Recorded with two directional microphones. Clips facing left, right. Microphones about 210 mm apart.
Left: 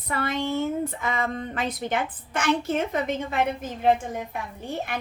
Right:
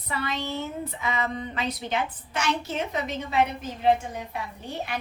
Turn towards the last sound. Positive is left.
turn(degrees=50)  # may be behind; listen again after turning